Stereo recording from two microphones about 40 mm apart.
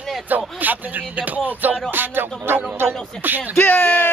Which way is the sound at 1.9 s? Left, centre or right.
Right.